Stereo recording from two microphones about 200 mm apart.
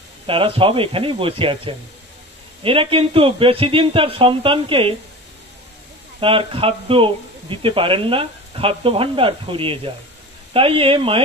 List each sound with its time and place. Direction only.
0.3 s speech: 25° right (ahead or behind)
6.1 s speech: 25° right (ahead or behind)